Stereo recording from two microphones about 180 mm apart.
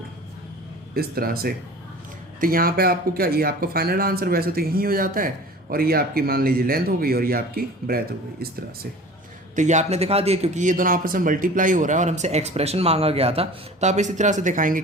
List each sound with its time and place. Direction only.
0.9 s speech: 55° right (ahead or behind)
9.6 s a man's voice: 40° right (ahead or behind)